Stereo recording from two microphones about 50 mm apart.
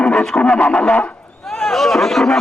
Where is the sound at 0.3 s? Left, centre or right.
Left.